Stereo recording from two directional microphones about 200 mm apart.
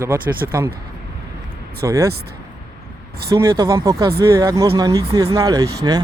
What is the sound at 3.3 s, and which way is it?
Speech, 15° right (ahead or behind).